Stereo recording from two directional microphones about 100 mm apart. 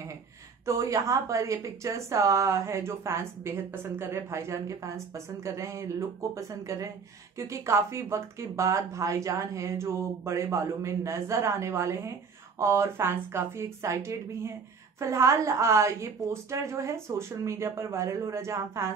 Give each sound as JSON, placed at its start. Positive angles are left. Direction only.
{"t": 0.7, "sound": "a woman's voice", "side_deg": -30}